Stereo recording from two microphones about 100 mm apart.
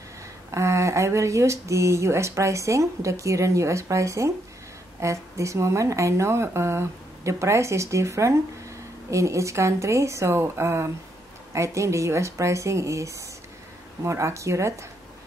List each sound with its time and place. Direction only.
0.5 s speech: 30° right (ahead or behind)